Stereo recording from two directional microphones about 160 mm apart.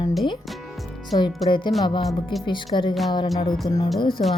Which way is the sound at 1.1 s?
30° left (ahead or behind).